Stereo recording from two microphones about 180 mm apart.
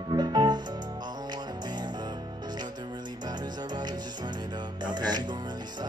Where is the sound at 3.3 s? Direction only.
25° right (ahead or behind).